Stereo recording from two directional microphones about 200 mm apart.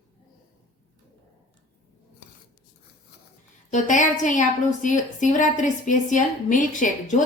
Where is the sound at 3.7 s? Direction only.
35° left (ahead or behind).